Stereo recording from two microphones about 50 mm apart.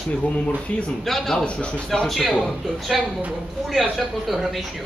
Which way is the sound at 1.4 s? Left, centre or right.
Left.